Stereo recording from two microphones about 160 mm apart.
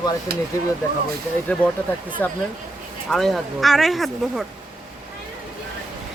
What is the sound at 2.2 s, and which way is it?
Speech, 15° left (ahead or behind).